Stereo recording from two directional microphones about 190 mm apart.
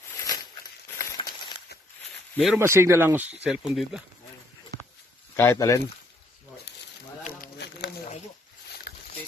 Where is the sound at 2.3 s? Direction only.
Centre (ahead or behind).